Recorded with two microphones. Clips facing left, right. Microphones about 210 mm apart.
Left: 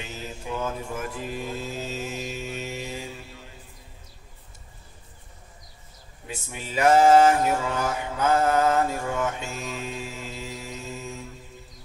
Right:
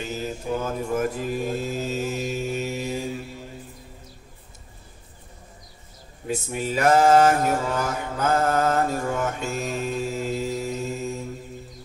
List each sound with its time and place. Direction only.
0.0 s mantra: 40° right (ahead or behind)
6.2 s mantra: 40° right (ahead or behind)